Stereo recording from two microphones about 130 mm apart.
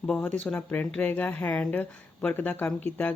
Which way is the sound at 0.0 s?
10° left (ahead or behind).